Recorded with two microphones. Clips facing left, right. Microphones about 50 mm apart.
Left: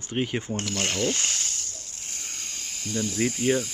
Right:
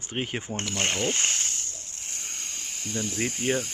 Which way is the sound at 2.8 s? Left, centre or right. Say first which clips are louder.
Left 3 dB; right.